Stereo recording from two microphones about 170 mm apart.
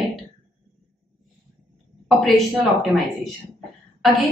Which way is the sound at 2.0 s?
Centre (ahead or behind).